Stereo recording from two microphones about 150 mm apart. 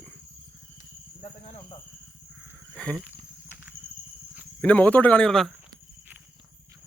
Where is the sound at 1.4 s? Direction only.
40° left (ahead or behind).